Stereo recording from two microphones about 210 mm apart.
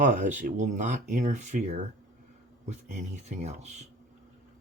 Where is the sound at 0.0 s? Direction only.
40° right (ahead or behind).